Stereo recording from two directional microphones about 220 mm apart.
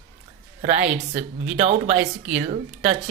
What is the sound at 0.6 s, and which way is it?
Speech, 30° right (ahead or behind).